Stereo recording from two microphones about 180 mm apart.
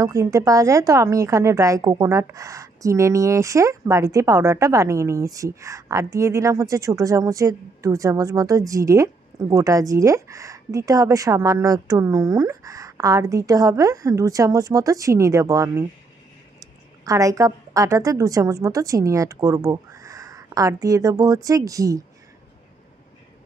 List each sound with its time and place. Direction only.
0.0 s a woman's voice: 20° right (ahead or behind)